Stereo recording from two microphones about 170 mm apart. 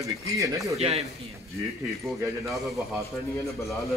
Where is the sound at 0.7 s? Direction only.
40° right (ahead or behind).